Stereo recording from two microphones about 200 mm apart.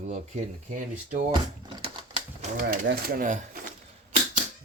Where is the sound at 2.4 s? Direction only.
40° right (ahead or behind).